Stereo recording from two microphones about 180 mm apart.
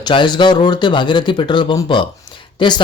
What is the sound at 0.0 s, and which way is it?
Speech, 25° left (ahead or behind).